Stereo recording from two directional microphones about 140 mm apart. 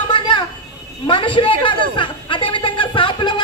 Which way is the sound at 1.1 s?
35° left (ahead or behind).